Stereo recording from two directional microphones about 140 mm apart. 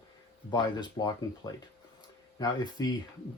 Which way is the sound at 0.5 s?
30° left (ahead or behind).